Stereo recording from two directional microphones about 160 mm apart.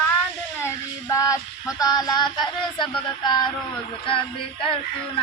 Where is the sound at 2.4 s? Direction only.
Centre (ahead or behind).